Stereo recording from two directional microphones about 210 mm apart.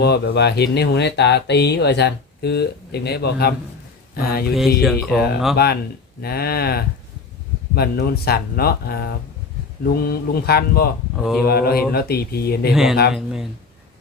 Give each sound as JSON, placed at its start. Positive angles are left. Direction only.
{"t": 0.0, "sound": "speech", "side_deg": 50}
{"t": 4.8, "sound": "speech", "side_deg": 0}
{"t": 6.2, "sound": "speech", "side_deg": 50}
{"t": 11.2, "sound": "speech", "side_deg": 0}
{"t": 11.4, "sound": "speech", "side_deg": 45}
{"t": 12.7, "sound": "speech", "side_deg": 0}